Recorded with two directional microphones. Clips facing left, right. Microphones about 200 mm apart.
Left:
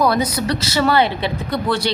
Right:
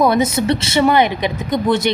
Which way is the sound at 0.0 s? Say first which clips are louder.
Right 3 dB; 25° right (ahead or behind).